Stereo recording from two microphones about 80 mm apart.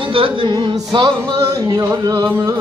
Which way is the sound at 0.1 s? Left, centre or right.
Right.